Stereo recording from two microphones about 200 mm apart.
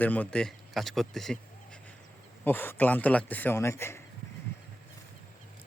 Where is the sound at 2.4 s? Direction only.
10° left (ahead or behind).